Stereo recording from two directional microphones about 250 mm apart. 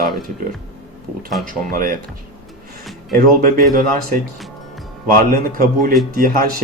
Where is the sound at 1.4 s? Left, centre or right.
Right.